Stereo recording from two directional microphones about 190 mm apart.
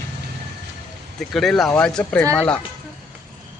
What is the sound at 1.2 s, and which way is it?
Speech, centre (ahead or behind).